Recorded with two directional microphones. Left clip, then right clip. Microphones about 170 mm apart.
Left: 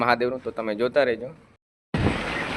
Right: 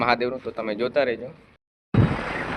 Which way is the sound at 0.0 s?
15° left (ahead or behind).